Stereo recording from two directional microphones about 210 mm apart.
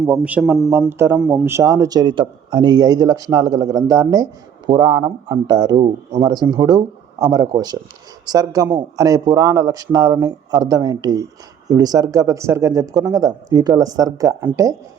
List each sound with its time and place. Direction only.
0.0 s speech: 5° right (ahead or behind)